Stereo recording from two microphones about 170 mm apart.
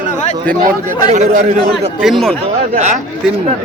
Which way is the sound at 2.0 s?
Centre (ahead or behind).